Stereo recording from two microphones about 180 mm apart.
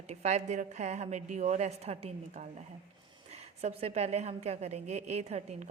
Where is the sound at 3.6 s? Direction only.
35° right (ahead or behind).